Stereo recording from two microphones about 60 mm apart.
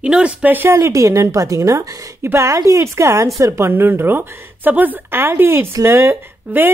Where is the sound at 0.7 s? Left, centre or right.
Right.